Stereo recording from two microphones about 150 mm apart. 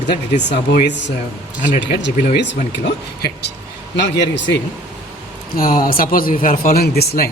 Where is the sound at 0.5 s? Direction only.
90° left.